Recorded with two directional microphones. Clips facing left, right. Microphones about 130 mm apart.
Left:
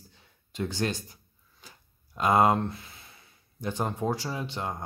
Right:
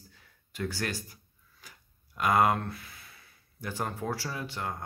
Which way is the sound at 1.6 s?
25° left (ahead or behind).